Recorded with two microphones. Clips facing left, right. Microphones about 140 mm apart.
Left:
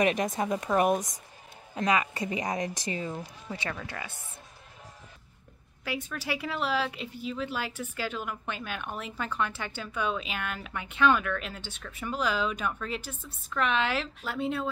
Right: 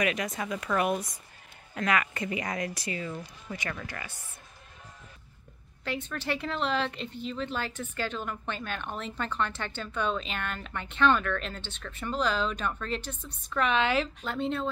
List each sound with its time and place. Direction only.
0.2 s speech: 45° left (ahead or behind)
0.6 s speech: 30° left (ahead or behind)
0.8 s speech: 45° left (ahead or behind)
1.8 s speech: 20° left (ahead or behind)
5.9 s speech: 10° left (ahead or behind)